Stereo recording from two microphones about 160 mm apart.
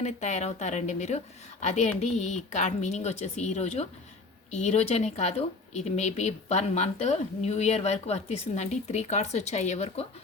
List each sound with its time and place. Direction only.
0.0 s speech: 45° left (ahead or behind)